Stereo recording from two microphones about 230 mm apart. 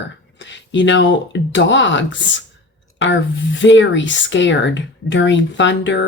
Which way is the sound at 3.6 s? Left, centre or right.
Left.